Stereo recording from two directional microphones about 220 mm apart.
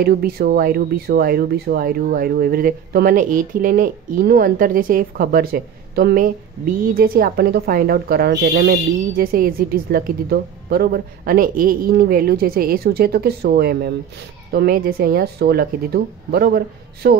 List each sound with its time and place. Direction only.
0.0 s speech: 45° right (ahead or behind)